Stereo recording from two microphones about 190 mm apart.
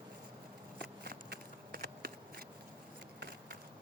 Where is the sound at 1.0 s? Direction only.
55° right (ahead or behind).